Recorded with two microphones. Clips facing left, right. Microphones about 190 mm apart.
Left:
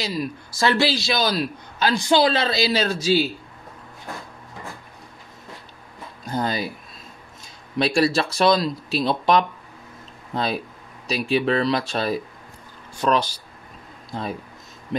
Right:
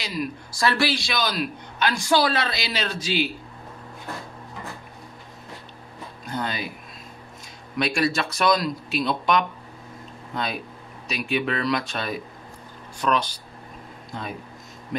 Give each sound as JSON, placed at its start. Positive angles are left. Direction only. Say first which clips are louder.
{"t": 0.0, "sound": "a man's voice", "louder": "left 2 dB", "side_deg": 30}
{"t": 6.3, "sound": "a man's voice", "louder": "left 5 dB", "side_deg": 35}
{"t": 7.7, "sound": "a man's voice", "louder": "left 4 dB", "side_deg": 30}